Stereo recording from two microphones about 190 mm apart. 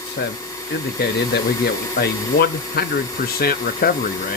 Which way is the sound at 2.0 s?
55° left (ahead or behind).